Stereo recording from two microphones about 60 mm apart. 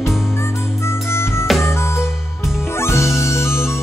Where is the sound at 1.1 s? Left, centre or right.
Left.